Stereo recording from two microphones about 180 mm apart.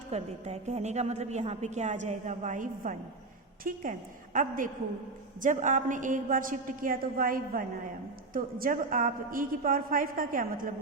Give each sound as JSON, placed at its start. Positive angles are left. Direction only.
{"t": 0.1, "sound": "a woman's voice", "side_deg": -35}